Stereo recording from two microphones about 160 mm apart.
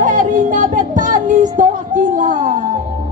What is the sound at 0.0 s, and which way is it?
Music, 55° right (ahead or behind).